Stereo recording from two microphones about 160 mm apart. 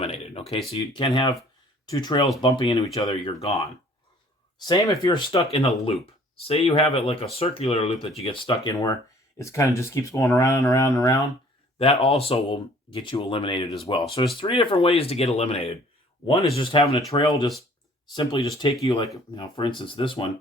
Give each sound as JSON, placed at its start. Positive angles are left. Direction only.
{"t": 0.0, "sound": "a sound", "side_deg": 40}
{"t": 0.8, "sound": "speech", "side_deg": 25}
{"t": 4.6, "sound": "speech", "side_deg": 25}
{"t": 5.3, "sound": "speech", "side_deg": 35}
{"t": 8.7, "sound": "speech", "side_deg": 20}
{"t": 11.8, "sound": "speech", "side_deg": 40}